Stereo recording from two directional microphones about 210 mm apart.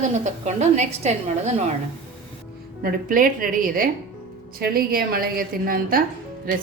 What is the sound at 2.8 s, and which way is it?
A woman's voice, 40° right (ahead or behind).